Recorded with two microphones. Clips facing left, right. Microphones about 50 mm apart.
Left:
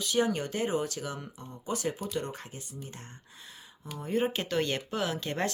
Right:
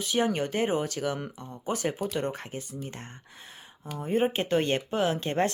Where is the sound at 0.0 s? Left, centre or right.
Right.